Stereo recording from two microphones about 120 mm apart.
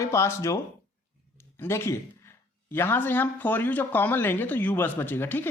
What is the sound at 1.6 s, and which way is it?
A man's voice, 20° left (ahead or behind).